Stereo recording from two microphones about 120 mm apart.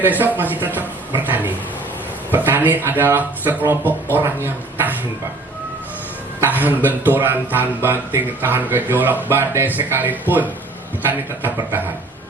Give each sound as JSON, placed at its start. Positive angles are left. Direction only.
{"t": 0.0, "sound": "speech", "side_deg": -15}
{"t": 6.4, "sound": "speech", "side_deg": -15}